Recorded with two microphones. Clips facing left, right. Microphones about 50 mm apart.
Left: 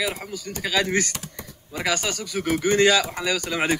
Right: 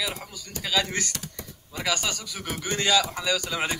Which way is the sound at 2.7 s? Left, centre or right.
Centre.